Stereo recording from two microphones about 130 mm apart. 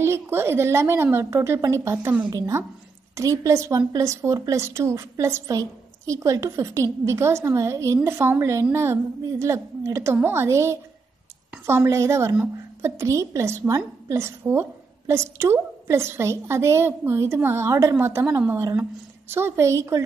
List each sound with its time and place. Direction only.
0.0 s a woman's voice: 20° right (ahead or behind)